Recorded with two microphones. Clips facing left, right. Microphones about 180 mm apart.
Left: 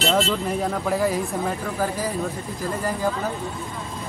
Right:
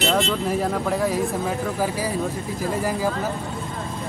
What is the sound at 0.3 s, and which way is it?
A man's voice, centre (ahead or behind).